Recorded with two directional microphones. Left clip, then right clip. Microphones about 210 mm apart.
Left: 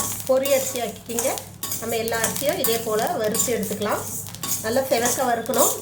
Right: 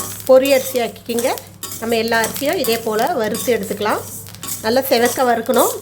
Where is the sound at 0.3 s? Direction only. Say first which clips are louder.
Right 9 dB; 50° right (ahead or behind).